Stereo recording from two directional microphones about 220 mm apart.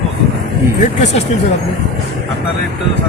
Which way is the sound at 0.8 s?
35° left (ahead or behind).